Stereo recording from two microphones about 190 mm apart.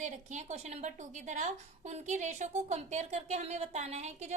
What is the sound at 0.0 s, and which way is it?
A woman's voice, 40° right (ahead or behind).